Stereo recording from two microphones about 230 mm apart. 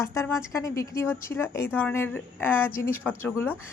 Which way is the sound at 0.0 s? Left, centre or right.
Centre.